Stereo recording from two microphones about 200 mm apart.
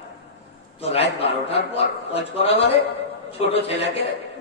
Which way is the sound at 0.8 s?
30° left (ahead or behind).